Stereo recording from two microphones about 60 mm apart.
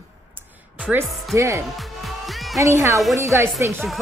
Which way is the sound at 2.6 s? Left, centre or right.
Right.